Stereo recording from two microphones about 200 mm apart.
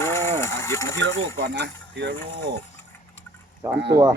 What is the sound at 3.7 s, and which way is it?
Speech, 60° right (ahead or behind).